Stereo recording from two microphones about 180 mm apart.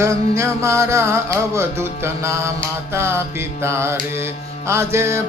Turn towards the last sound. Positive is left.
turn(degrees=-15)  # may be behind; listen again after turning